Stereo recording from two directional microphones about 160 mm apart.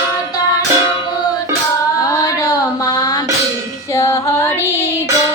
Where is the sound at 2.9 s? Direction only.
25° left (ahead or behind).